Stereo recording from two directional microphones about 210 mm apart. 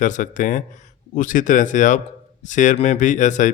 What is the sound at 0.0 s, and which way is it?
Speech, 35° left (ahead or behind).